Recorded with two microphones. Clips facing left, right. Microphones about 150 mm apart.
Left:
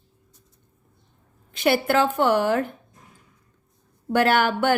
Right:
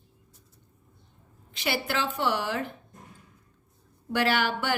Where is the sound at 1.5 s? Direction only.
50° left (ahead or behind).